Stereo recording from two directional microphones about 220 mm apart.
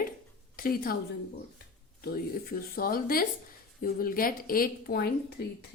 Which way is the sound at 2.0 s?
45° left (ahead or behind).